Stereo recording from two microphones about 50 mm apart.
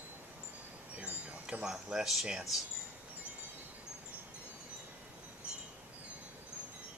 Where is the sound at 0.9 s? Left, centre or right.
Right; by 2.2 s centre.